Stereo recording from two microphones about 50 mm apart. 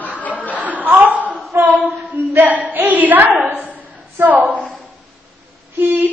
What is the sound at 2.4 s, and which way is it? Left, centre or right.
A woman's voice, right.